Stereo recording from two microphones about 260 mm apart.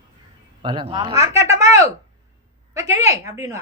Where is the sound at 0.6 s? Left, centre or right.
Centre.